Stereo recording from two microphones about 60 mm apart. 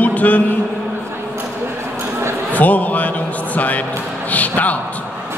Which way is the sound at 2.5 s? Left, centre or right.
Left.